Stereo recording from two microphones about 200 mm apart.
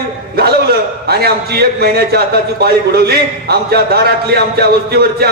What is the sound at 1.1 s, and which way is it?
A man's voice, 50° right (ahead or behind).